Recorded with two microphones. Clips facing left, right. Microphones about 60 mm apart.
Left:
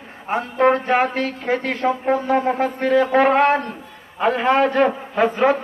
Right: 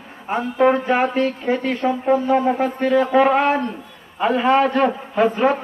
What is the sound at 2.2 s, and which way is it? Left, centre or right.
A man's voice, left.